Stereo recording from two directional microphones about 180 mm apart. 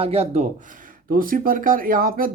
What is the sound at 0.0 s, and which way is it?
Speech, 35° right (ahead or behind).